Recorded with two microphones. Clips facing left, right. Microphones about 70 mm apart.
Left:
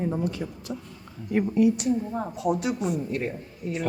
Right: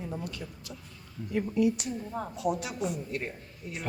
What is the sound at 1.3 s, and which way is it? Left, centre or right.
Speech, left.